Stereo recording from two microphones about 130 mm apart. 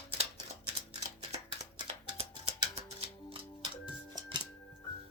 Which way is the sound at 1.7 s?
40° right (ahead or behind).